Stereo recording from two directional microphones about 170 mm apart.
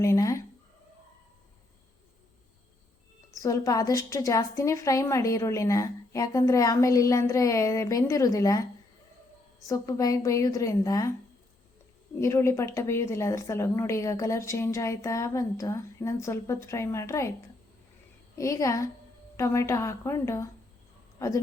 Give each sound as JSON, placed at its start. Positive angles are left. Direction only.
{"t": 0.0, "sound": "a woman's voice", "side_deg": 20}
{"t": 3.4, "sound": "a woman's voice", "side_deg": 20}
{"t": 9.6, "sound": "a woman's voice", "side_deg": 20}
{"t": 12.2, "sound": "a woman's voice", "side_deg": 15}
{"t": 18.3, "sound": "a woman's voice", "side_deg": 20}